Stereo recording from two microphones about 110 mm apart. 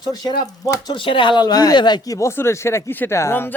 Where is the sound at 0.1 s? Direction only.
35° left (ahead or behind).